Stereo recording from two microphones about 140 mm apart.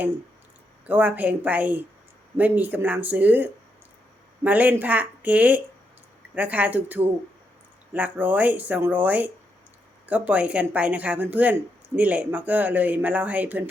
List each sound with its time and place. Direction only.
0.9 s speech: 10° right (ahead or behind)